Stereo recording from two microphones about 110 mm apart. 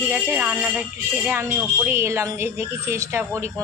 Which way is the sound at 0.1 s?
20° right (ahead or behind).